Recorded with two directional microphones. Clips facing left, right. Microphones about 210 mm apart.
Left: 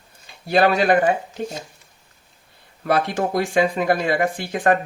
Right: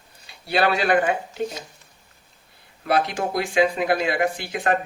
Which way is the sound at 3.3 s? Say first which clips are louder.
Even; 45° left (ahead or behind).